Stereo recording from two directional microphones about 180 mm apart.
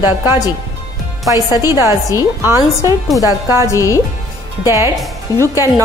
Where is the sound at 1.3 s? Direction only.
20° left (ahead or behind).